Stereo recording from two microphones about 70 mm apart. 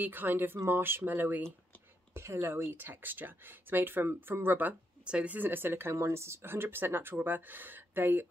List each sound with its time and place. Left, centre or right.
0.0 s speech: right
2.1 s speech: right
5.0 s speech: centre